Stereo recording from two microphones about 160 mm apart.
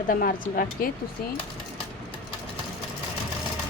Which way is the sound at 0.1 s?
60° left (ahead or behind).